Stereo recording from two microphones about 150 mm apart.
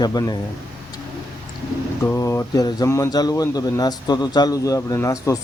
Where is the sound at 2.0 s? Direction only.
20° left (ahead or behind).